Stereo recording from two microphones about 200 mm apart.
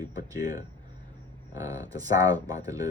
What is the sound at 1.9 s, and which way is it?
Speech, 20° right (ahead or behind).